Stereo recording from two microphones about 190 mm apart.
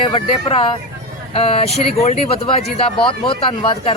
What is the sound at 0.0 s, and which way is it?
Speech, 25° left (ahead or behind).